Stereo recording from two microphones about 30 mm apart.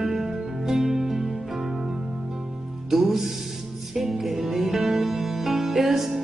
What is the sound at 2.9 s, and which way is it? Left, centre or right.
Music, centre.